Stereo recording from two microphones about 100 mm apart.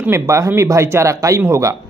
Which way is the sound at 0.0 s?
25° right (ahead or behind).